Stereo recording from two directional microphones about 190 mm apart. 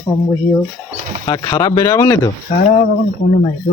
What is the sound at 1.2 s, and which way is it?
Speech, 20° left (ahead or behind).